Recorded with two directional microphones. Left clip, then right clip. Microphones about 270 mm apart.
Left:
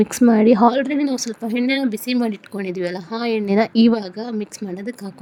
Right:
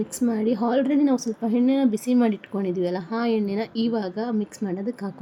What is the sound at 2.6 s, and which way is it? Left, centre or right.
A woman's voice, left.